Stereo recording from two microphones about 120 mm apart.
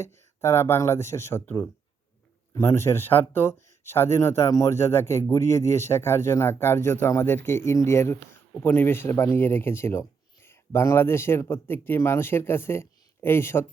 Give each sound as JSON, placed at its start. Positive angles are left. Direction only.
{"t": 0.0, "sound": "speech", "side_deg": 20}